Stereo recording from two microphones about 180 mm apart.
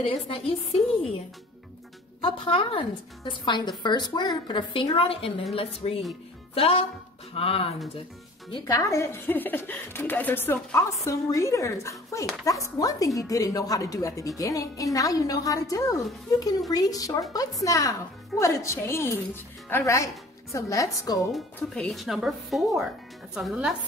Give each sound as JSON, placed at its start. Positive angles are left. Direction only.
{"t": 0.0, "sound": "a woman's voice", "side_deg": 30}
{"t": 2.2, "sound": "a woman's voice", "side_deg": 30}
{"t": 21.5, "sound": "speech", "side_deg": 5}